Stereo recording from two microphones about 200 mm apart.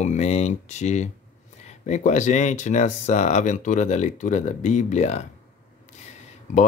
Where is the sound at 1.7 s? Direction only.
35° left (ahead or behind).